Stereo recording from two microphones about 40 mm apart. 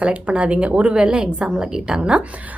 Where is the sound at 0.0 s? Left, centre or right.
Right.